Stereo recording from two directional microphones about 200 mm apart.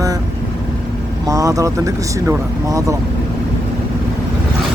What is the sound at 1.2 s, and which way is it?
Speech, 15° right (ahead or behind).